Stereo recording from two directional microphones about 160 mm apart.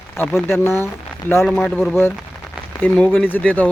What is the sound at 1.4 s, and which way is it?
Speech, 5° left (ahead or behind).